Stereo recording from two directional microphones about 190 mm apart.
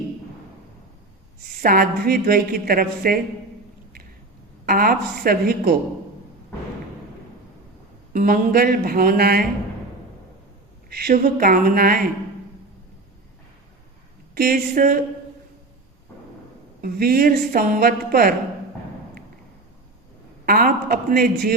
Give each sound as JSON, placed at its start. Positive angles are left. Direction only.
{"t": 1.6, "sound": "a woman's voice", "side_deg": -50}
{"t": 4.6, "sound": "a woman's voice", "side_deg": -50}
{"t": 8.1, "sound": "a woman's voice", "side_deg": -50}
{"t": 10.9, "sound": "a woman's voice", "side_deg": -50}
{"t": 14.3, "sound": "a woman's voice", "side_deg": -50}
{"t": 16.8, "sound": "a woman's voice", "side_deg": -50}
{"t": 20.4, "sound": "a woman's voice", "side_deg": -50}